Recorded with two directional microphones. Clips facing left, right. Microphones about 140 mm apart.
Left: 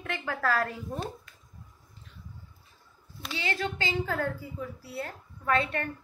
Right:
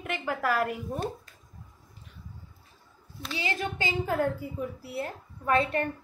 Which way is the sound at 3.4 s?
15° right (ahead or behind).